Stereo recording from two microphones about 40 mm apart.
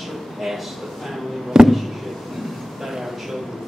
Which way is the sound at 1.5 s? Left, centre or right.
Centre.